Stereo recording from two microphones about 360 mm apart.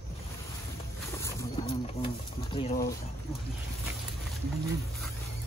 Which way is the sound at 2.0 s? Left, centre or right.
Centre.